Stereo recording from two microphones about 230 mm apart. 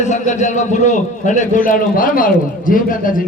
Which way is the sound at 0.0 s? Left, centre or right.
Left.